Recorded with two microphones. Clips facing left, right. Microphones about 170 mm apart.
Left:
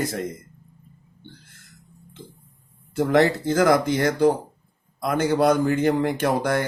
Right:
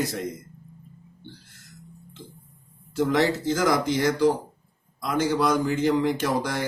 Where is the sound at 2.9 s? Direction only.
55° left (ahead or behind).